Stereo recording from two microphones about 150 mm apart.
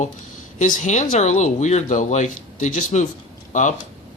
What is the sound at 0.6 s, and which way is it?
Speech, 55° left (ahead or behind).